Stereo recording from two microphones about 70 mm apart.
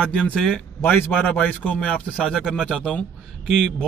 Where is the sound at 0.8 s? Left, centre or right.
Left; by 3.7 s centre.